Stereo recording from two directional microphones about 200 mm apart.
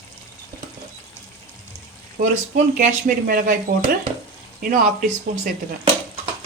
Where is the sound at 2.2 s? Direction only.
40° right (ahead or behind).